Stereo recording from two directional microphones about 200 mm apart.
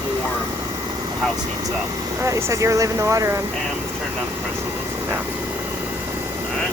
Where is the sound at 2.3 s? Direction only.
15° right (ahead or behind).